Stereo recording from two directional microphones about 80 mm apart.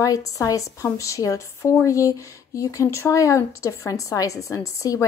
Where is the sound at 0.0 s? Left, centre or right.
Left.